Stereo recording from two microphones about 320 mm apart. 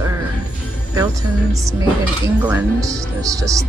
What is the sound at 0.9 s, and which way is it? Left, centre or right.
Speech, centre.